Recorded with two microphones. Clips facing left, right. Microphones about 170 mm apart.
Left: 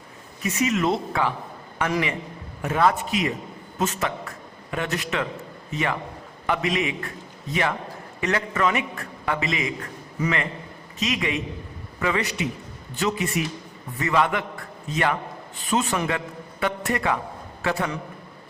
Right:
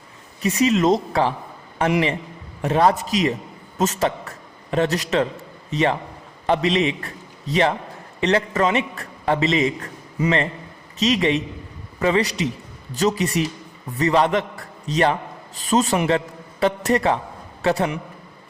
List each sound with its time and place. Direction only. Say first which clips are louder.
0.4 s a man's voice: right 5 dB; 30° right (ahead or behind)
15.7 s a man's voice: right 5 dB; 35° right (ahead or behind)